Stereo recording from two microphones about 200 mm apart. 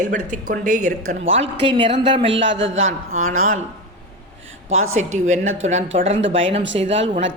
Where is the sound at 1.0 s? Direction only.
75° right (ahead or behind).